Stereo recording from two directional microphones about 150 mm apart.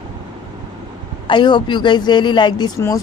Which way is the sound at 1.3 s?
30° left (ahead or behind).